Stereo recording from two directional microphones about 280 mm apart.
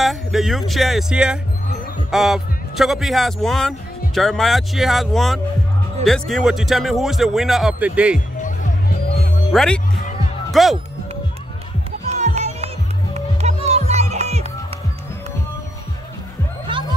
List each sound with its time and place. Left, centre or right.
0.0 s speech: centre
8.4 s music: left
9.5 s speech: centre
12.1 s music: right